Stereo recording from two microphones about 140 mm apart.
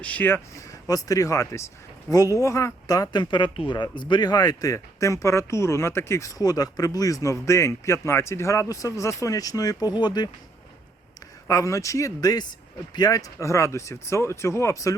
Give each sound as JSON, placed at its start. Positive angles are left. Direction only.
{"t": 0.0, "sound": "speech", "side_deg": 10}
{"t": 0.9, "sound": "speech", "side_deg": 25}
{"t": 11.4, "sound": "speech", "side_deg": 25}